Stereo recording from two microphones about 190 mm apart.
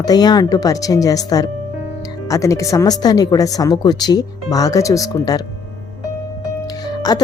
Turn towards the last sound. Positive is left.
turn(degrees=20)  # may be behind; listen again after turning